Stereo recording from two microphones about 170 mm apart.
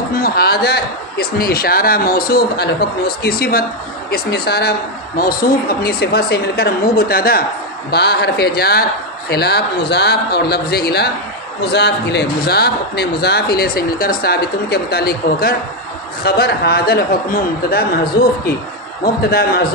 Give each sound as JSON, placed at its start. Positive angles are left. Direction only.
{"t": 0.2, "sound": "speech", "side_deg": 65}
{"t": 7.9, "sound": "a man's voice", "side_deg": 75}
{"t": 11.7, "sound": "a man's voice", "side_deg": 80}